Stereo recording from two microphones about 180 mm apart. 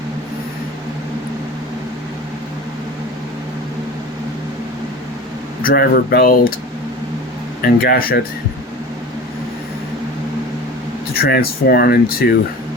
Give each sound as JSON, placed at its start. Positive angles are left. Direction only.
{"t": 5.6, "sound": "speech", "side_deg": 55}
{"t": 7.6, "sound": "speech", "side_deg": 55}
{"t": 11.1, "sound": "speech", "side_deg": 60}